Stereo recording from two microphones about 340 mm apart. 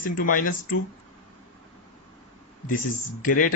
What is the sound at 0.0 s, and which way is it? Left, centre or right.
Speech, left.